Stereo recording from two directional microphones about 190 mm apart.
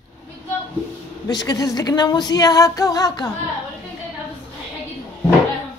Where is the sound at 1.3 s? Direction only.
20° left (ahead or behind).